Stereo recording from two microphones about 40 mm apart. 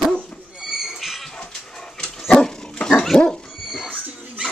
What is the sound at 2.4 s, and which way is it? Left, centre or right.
Dog, centre.